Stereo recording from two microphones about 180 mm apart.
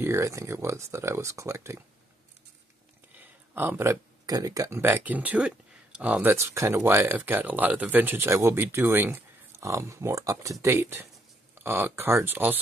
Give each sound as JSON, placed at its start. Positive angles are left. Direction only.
{"t": 0.0, "sound": "speech", "side_deg": -15}
{"t": 3.2, "sound": "speech", "side_deg": -10}